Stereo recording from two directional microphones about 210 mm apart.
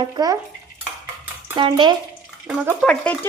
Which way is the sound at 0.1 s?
15° right (ahead or behind).